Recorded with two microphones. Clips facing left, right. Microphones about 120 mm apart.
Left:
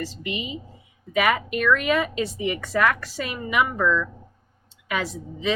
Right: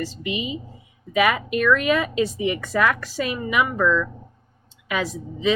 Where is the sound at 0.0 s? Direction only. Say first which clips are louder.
Right 3 dB; 20° right (ahead or behind).